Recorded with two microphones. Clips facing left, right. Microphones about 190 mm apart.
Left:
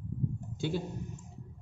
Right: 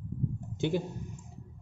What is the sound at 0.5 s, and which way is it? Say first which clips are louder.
Speech: right 4 dB; 20° right (ahead or behind).